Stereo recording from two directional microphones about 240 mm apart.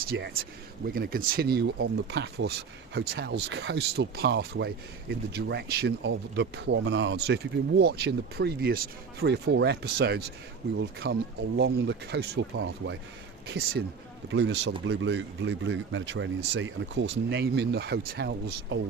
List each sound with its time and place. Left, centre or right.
0.1 s speech: right